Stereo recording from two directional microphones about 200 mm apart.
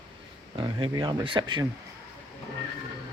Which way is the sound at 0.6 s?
20° right (ahead or behind).